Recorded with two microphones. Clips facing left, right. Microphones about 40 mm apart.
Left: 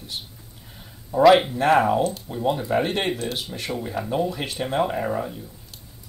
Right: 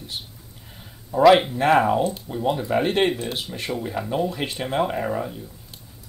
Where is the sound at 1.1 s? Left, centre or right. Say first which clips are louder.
Even; centre.